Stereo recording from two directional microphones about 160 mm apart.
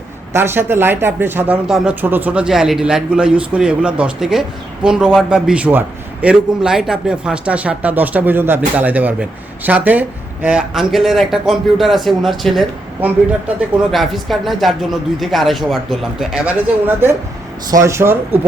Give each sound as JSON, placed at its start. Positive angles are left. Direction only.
{"t": 0.3, "sound": "speech", "side_deg": -15}
{"t": 13.9, "sound": "speech", "side_deg": 0}